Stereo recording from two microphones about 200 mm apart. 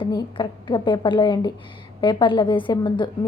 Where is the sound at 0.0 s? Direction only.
20° left (ahead or behind).